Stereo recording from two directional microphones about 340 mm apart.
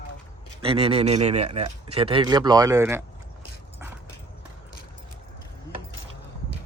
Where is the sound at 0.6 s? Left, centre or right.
Centre.